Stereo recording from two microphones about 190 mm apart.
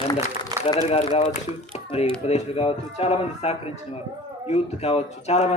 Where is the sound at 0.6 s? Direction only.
30° left (ahead or behind).